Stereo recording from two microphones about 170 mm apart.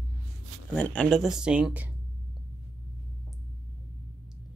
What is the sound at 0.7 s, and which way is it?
Speech, 5° left (ahead or behind).